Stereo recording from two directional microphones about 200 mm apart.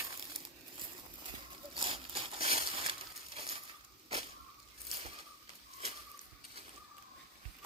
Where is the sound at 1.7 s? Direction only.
30° right (ahead or behind).